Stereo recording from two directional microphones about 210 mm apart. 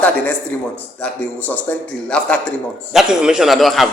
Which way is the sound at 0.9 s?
5° left (ahead or behind).